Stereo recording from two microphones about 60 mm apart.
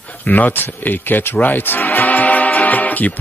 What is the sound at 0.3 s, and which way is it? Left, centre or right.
Speech, left.